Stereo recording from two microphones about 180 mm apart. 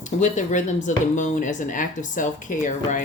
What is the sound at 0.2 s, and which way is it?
Speech, 40° left (ahead or behind).